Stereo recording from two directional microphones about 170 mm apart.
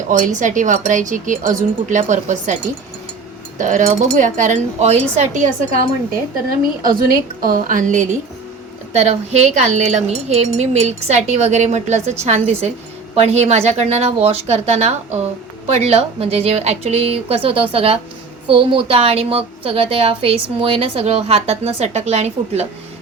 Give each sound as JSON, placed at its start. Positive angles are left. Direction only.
{"t": 0.1, "sound": "speech", "side_deg": -50}
{"t": 3.6, "sound": "speech", "side_deg": -50}
{"t": 6.6, "sound": "a woman's voice", "side_deg": -60}